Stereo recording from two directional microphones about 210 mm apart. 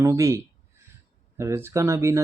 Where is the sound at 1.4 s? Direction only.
15° right (ahead or behind).